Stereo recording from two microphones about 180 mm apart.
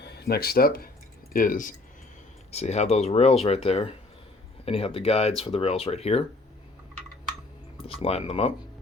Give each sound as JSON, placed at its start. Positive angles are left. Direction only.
{"t": 0.0, "sound": "speech", "side_deg": 60}
{"t": 2.5, "sound": "speech", "side_deg": 35}
{"t": 7.9, "sound": "speech", "side_deg": 35}